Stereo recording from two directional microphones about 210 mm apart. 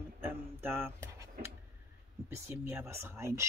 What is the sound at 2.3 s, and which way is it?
Speech, 10° right (ahead or behind).